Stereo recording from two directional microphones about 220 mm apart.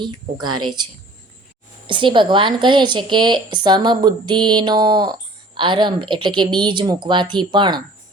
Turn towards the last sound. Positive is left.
turn(degrees=-20)  # may be behind; listen again after turning